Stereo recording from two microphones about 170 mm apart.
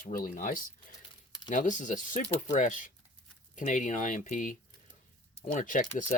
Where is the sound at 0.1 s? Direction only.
55° left (ahead or behind).